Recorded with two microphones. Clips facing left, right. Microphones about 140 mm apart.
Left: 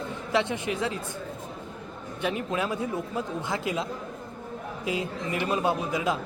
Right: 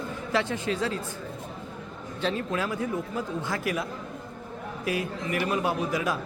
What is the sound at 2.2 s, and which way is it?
A man's voice, 15° left (ahead or behind).